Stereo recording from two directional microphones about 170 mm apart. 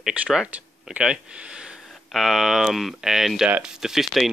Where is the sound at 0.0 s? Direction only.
5° right (ahead or behind).